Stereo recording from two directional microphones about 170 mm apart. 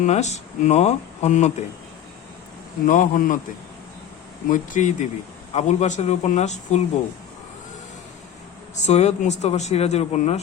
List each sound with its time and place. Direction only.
0.0 s speech: 40° left (ahead or behind)
2.8 s speech: 50° left (ahead or behind)
4.4 s speech: 50° left (ahead or behind)
8.7 s speech: 40° left (ahead or behind)